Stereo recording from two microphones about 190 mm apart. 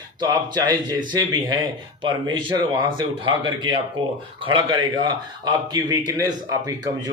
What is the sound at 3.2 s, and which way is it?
A man's voice, 25° right (ahead or behind).